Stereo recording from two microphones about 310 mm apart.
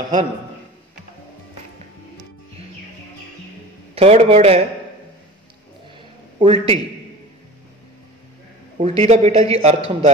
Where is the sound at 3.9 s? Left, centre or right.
Centre.